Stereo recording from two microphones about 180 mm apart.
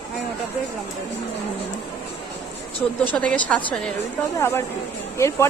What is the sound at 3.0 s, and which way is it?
Speech, 10° left (ahead or behind).